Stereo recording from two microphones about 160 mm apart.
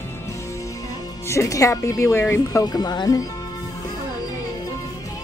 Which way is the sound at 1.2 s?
20° left (ahead or behind).